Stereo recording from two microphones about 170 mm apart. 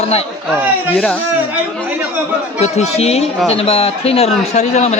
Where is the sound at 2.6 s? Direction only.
40° left (ahead or behind).